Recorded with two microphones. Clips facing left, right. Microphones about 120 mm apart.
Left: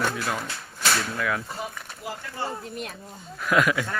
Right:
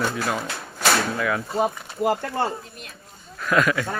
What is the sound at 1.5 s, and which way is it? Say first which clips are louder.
Speech: right 12 dB; 60° right (ahead or behind).